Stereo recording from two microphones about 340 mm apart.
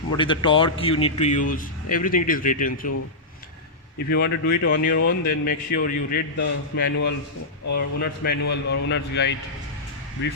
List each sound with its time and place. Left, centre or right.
0.2 s speech: centre
4.1 s speech: left